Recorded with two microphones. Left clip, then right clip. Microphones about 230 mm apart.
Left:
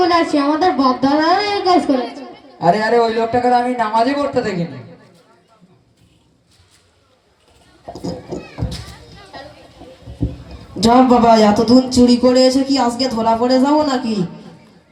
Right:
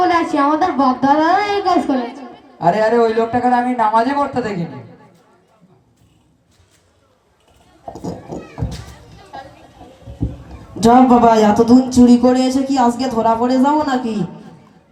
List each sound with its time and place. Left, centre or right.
0.0 s a child's voice: right
7.9 s children playing: right
10.8 s a child's voice: right